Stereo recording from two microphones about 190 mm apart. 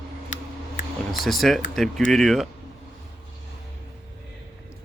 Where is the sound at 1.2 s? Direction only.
Centre (ahead or behind).